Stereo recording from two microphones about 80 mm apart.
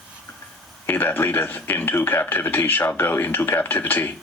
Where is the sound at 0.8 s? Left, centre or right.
Left.